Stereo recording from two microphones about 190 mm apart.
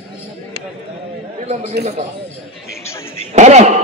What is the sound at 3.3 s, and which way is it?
Speech, 35° right (ahead or behind).